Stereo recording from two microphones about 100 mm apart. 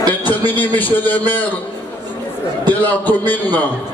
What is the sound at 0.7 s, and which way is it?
Speech, 20° left (ahead or behind).